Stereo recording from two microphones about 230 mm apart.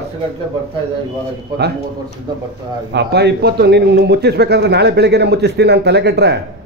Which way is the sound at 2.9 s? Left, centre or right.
Right.